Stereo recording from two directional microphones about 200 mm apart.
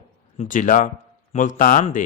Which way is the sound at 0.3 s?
40° left (ahead or behind).